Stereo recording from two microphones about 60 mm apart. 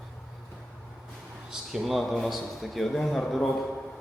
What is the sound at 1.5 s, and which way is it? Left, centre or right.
A man's voice, centre.